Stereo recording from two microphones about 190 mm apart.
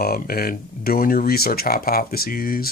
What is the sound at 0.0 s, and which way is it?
Speech, 50° left (ahead or behind).